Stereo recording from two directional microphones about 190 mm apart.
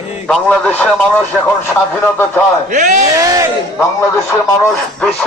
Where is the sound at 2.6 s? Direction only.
40° right (ahead or behind).